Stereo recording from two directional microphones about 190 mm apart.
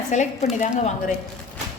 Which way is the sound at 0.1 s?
40° left (ahead or behind).